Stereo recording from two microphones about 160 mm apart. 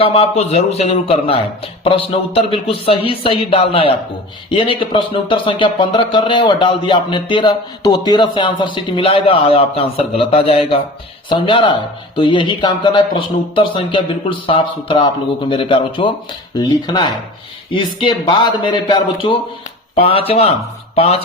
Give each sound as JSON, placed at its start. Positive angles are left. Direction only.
{"t": 0.0, "sound": "speech", "side_deg": 40}